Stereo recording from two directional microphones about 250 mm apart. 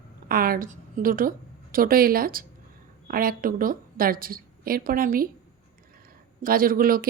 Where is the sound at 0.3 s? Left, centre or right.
Right.